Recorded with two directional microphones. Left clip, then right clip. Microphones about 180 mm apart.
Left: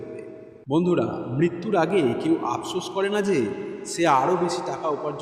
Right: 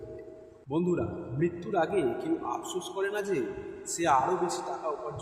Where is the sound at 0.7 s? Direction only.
35° left (ahead or behind).